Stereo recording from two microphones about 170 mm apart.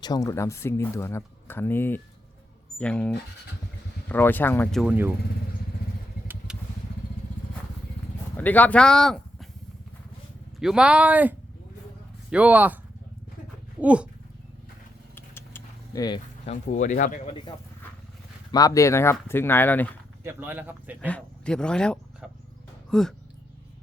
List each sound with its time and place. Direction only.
0.0 s speech: 20° left (ahead or behind)
4.7 s speech: 5° right (ahead or behind)
6.5 s vehicle: 5° right (ahead or behind)
8.4 s speech: 10° left (ahead or behind)
10.6 s speech: 5° right (ahead or behind)
13.8 s speech: 5° right (ahead or behind)
15.1 s vehicle: 15° left (ahead or behind)
16.5 s speech: 45° left (ahead or behind)
18.5 s speech: 20° left (ahead or behind)
20.2 s speech: 10° right (ahead or behind)
21.0 s speech: 5° left (ahead or behind)